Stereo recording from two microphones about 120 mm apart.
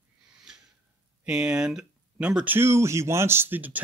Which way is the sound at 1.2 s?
10° right (ahead or behind).